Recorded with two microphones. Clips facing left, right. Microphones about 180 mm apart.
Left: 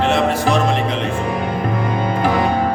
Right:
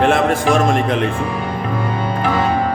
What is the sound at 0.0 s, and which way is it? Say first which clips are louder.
Music: right 2 dB; 50° right (ahead or behind).